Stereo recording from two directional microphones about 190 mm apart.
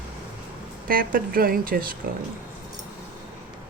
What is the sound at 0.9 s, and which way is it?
Speech, 50° right (ahead or behind).